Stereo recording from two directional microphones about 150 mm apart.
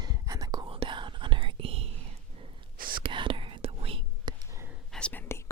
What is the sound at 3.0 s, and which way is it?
Whispering, 35° right (ahead or behind).